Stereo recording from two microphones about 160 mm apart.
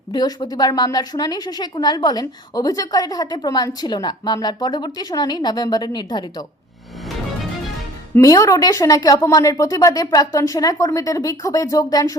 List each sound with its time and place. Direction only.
0.1 s a woman's voice: 25° left (ahead or behind)
8.1 s a woman's voice: 20° left (ahead or behind)